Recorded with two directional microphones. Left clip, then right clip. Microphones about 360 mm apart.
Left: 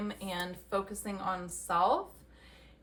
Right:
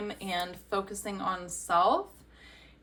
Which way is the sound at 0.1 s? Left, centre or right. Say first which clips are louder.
Right 4 dB; centre.